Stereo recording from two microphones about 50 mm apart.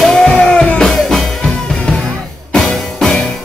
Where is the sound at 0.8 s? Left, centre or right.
Centre.